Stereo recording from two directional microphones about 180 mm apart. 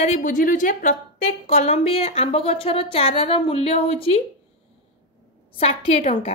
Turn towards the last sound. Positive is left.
turn(degrees=35)  # may be behind; listen again after turning